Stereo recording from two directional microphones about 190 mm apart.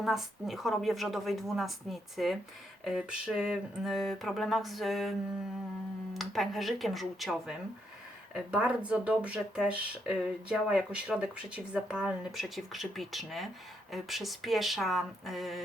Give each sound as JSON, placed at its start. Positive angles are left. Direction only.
{"t": 0.0, "sound": "speech", "side_deg": 0}
{"t": 6.1, "sound": "speech", "side_deg": 0}